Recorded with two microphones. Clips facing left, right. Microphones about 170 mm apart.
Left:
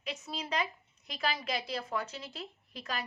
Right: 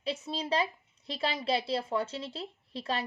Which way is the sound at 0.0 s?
30° right (ahead or behind).